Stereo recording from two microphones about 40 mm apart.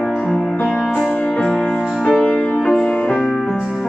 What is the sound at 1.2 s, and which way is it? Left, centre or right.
Music, left.